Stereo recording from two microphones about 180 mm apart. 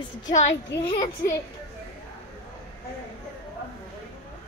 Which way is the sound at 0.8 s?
15° left (ahead or behind).